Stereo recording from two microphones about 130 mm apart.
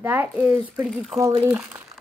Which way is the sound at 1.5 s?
15° right (ahead or behind).